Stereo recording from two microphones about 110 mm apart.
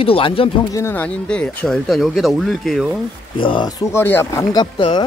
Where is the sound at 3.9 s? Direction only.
20° left (ahead or behind).